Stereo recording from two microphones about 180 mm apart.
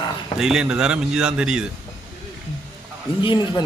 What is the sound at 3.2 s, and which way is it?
Speech, 25° left (ahead or behind).